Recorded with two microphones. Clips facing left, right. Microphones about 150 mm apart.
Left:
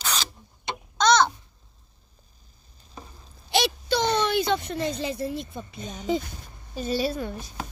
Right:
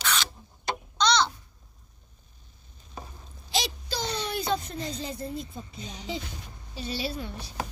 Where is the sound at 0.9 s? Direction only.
50° left (ahead or behind).